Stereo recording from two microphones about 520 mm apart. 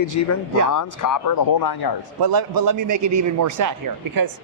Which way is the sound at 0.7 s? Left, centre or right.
Left.